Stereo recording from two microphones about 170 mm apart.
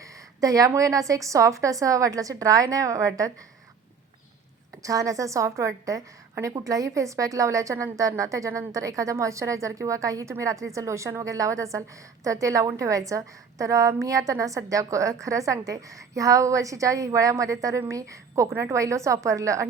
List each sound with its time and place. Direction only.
0.0 s a woman's voice: 20° right (ahead or behind)
4.8 s a woman's voice: 20° right (ahead or behind)